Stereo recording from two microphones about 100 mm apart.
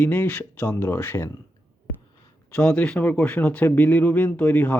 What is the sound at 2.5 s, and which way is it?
Speech, 15° left (ahead or behind).